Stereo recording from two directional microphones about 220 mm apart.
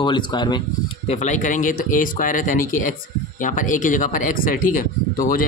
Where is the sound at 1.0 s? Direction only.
30° left (ahead or behind).